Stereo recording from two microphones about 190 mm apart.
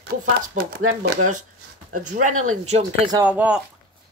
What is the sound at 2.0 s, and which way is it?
Speech, 45° right (ahead or behind).